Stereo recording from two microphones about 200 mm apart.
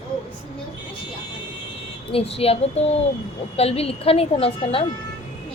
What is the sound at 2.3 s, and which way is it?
Child singing, 30° left (ahead or behind).